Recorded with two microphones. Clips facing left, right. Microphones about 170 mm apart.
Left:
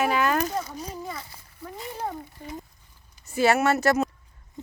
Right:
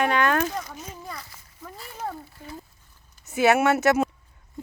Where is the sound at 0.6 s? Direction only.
30° left (ahead or behind).